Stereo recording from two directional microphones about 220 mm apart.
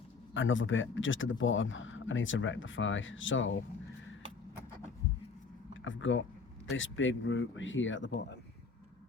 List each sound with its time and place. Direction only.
0.3 s speech: 60° left (ahead or behind)
5.8 s speech: 60° left (ahead or behind)